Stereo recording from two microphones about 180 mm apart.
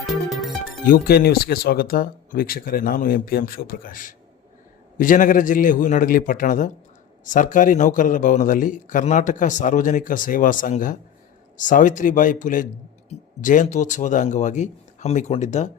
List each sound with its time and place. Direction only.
0.0 s music: centre (ahead or behind)
0.9 s a man's voice: 55° left (ahead or behind); by 15.7 s 40° left (ahead or behind)